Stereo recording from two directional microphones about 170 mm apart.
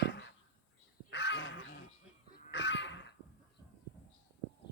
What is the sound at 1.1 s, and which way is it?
Crow, 90° left.